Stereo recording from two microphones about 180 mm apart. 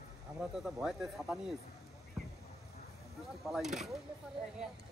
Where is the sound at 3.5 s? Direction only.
Centre (ahead or behind).